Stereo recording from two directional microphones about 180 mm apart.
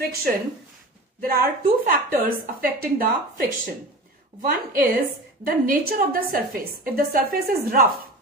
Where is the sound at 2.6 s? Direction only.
55° right (ahead or behind).